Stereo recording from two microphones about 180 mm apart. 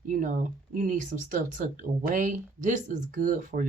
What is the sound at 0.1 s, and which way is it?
Speech, 45° right (ahead or behind).